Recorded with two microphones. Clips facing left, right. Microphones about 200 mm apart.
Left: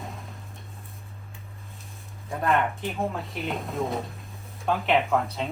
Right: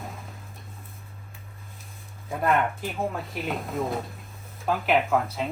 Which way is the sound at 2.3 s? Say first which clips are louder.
Right 1 dB; centre (ahead or behind).